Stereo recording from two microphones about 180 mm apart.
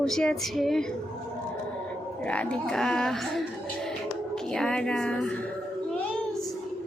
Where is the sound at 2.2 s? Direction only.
5° left (ahead or behind).